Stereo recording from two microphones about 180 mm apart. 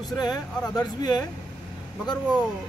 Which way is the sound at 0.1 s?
20° left (ahead or behind).